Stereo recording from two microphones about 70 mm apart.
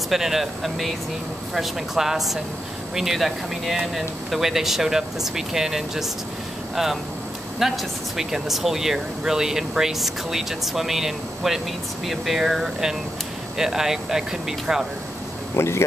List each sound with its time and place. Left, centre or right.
0.1 s speech: centre
15.5 s speech: left